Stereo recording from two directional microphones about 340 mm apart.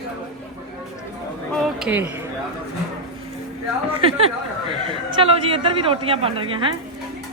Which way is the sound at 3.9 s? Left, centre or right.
Centre.